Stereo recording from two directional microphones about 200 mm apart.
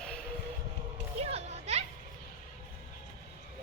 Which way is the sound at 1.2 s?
30° right (ahead or behind).